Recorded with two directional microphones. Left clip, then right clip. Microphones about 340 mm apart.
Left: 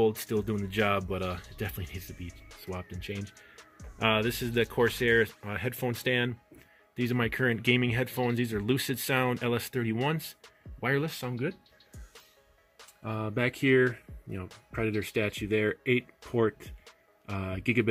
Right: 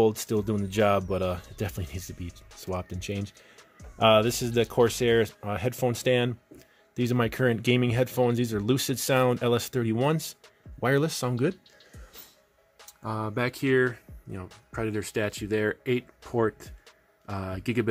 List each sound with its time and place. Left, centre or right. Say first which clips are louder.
0.0 s speech: right 3 dB; centre
3.5 s music: right 1 dB; centre
4.0 s speech: right 7 dB; centre
12.7 s speech: right 4 dB; centre
16.8 s music: right 2 dB; centre